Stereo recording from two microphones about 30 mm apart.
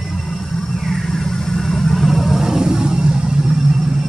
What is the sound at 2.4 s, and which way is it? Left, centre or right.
Vehicle, centre.